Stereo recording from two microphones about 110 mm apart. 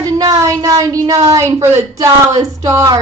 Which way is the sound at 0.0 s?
35° right (ahead or behind).